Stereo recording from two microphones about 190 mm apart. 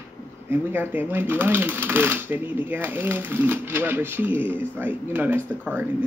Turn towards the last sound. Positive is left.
turn(degrees=-10)  # may be behind; listen again after turning